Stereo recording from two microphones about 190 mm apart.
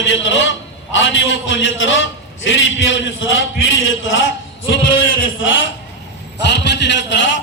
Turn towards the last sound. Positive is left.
turn(degrees=70)  # may be behind; listen again after turning